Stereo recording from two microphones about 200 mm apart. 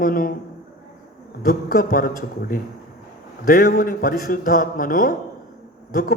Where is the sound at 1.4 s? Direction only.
45° left (ahead or behind).